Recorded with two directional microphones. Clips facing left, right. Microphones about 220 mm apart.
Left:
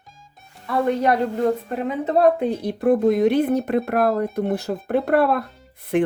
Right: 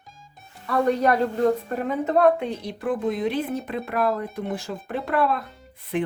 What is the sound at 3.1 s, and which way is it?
Speech, 65° left (ahead or behind).